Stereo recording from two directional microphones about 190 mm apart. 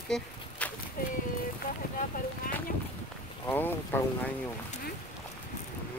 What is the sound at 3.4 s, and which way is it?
Speech, 10° left (ahead or behind).